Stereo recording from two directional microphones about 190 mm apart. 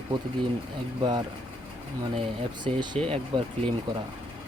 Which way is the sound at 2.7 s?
35° right (ahead or behind).